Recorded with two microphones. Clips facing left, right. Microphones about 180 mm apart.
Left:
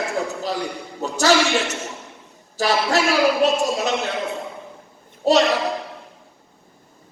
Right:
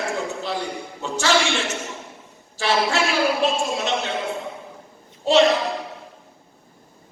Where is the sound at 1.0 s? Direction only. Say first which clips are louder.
Left 4 dB; 40° left (ahead or behind).